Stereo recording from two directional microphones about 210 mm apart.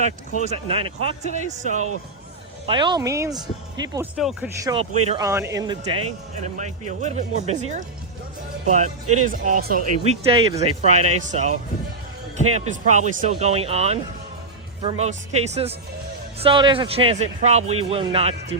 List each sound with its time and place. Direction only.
0.4 s a man's voice: 25° right (ahead or behind)
2.6 s a man's voice: 20° right (ahead or behind)
4.1 s speech: 5° right (ahead or behind)
4.6 s a man's voice: 25° right (ahead or behind)
5.2 s speech: 15° right (ahead or behind)
6.3 s speech: 35° right (ahead or behind)
10.0 s a man's voice: 30° right (ahead or behind)